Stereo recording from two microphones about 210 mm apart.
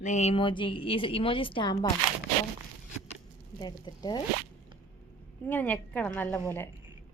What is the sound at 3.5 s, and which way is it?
Speech, 20° left (ahead or behind).